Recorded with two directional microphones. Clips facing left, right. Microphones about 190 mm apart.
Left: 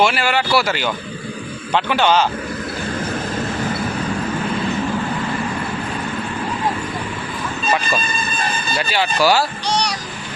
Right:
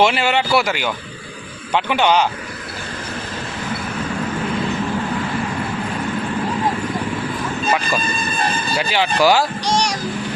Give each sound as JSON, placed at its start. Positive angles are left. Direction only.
{"t": 0.0, "sound": "speech", "side_deg": -20}
{"t": 8.7, "sound": "speech", "side_deg": -15}